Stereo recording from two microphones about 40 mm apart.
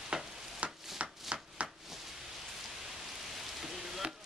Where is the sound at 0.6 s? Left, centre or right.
Right.